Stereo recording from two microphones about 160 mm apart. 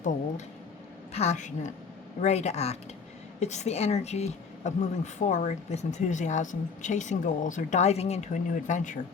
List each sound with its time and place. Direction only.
1.1 s speech: 45° left (ahead or behind)